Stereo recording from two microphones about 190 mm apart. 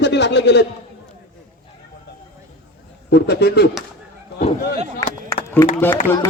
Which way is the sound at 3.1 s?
60° left (ahead or behind).